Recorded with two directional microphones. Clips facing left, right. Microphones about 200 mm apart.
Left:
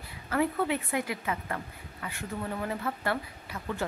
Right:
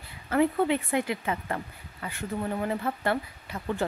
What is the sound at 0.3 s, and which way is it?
Speech, 25° right (ahead or behind).